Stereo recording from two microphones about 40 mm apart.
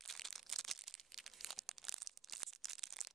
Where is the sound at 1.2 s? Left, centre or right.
Centre.